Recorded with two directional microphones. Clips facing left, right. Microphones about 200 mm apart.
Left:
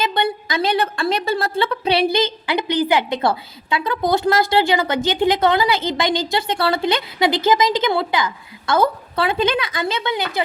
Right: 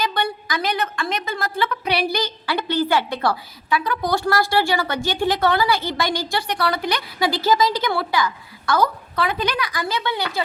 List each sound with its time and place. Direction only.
0.0 s a woman's voice: 25° left (ahead or behind)